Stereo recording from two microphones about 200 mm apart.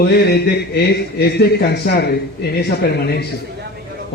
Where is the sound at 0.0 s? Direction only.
55° left (ahead or behind).